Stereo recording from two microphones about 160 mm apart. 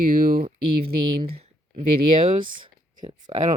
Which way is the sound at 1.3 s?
40° right (ahead or behind).